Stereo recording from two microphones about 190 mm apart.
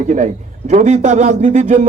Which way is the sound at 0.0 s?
35° right (ahead or behind).